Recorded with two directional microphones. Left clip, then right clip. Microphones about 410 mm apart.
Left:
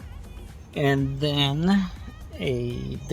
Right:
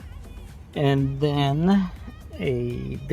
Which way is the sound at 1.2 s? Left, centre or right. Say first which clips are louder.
Right 2 dB; centre.